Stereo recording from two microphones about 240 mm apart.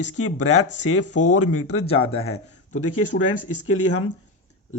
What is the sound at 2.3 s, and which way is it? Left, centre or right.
Speech, left.